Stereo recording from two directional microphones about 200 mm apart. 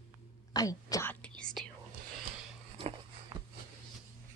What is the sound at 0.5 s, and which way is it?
Whispering, 15° left (ahead or behind).